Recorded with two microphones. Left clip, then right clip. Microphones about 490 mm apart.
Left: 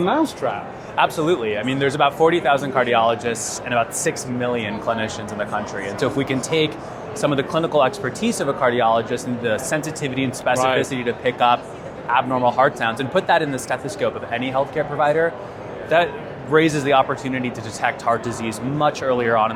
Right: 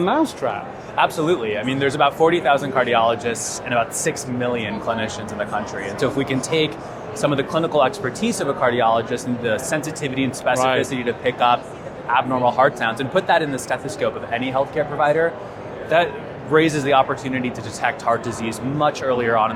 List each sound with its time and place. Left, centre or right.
0.0 s a man's voice: right
0.9 s a man's voice: left